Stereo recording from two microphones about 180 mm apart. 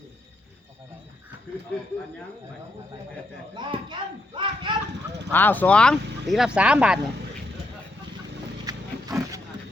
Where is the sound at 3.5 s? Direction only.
25° right (ahead or behind).